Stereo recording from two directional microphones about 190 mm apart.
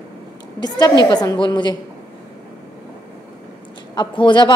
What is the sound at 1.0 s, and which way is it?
Speech, 20° left (ahead or behind).